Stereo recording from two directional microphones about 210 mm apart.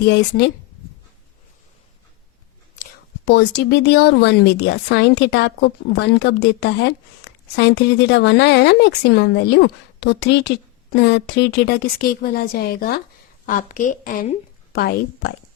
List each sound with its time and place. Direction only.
0.1 s a woman's voice: 55° left (ahead or behind)
3.2 s a woman's voice: 55° left (ahead or behind)